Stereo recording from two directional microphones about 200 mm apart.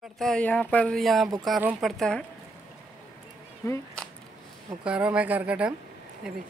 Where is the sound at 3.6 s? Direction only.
15° left (ahead or behind).